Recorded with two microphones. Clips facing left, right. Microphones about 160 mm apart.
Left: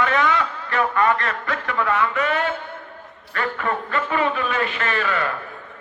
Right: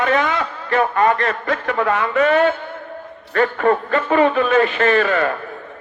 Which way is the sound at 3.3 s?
40° right (ahead or behind).